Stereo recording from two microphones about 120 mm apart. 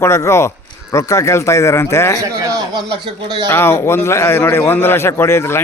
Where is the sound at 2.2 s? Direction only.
30° right (ahead or behind).